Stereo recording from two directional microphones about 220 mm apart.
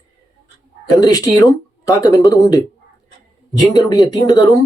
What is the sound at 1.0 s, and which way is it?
Speech, 15° left (ahead or behind).